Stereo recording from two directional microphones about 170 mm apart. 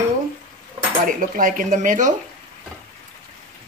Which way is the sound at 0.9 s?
50° right (ahead or behind).